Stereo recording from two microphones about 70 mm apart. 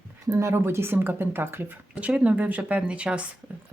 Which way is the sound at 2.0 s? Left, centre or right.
Centre.